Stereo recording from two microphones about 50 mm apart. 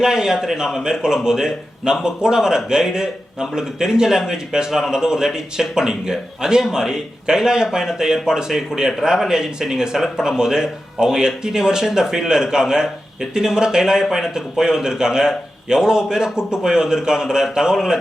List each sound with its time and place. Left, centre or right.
0.0 s a man's voice: centre